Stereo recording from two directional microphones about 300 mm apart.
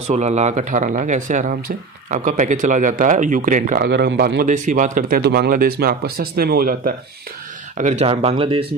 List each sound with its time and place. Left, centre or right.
0.0 s speech: right